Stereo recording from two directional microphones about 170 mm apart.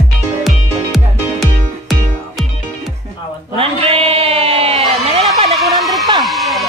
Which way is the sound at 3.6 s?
35° right (ahead or behind).